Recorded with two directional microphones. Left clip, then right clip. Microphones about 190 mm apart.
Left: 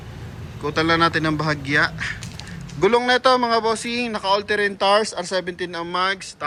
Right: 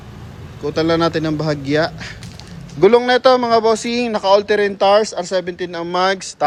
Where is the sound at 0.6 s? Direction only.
20° right (ahead or behind).